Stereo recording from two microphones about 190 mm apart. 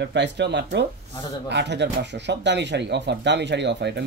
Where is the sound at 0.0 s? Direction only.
65° right (ahead or behind).